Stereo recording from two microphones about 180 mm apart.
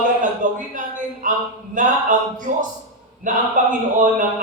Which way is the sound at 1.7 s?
45° right (ahead or behind).